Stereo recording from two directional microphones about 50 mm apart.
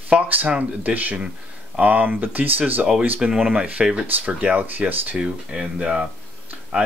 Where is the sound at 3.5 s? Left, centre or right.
Right.